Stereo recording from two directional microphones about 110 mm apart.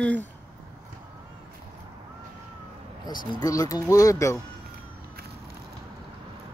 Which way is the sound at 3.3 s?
30° left (ahead or behind).